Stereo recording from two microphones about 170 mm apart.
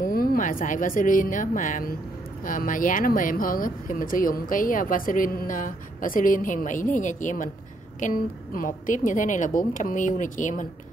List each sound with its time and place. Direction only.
0.0 s speech: 55° left (ahead or behind)